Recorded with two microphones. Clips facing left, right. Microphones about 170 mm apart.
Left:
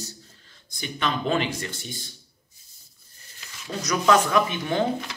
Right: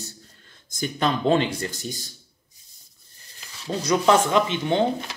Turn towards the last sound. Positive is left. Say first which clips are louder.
# right 2 dB
turn(degrees=-25)  # may be behind; listen again after turning